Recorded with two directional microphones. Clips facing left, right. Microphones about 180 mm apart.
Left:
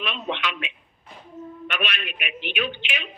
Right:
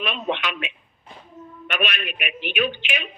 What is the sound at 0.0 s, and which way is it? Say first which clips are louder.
A man's voice: right 3 dB; 45° right (ahead or behind).